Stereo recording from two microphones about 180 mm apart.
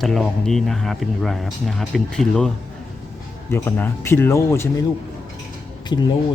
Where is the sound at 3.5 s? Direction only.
10° left (ahead or behind).